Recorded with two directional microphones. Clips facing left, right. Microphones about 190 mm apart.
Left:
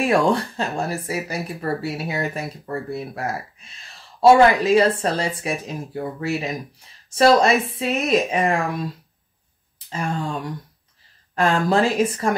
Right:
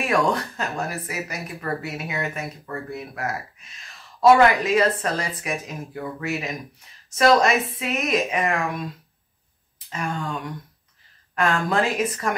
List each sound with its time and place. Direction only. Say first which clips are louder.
0.1 s speech: left 3 dB; 30° left (ahead or behind)
9.8 s speech: left 3 dB; 30° left (ahead or behind)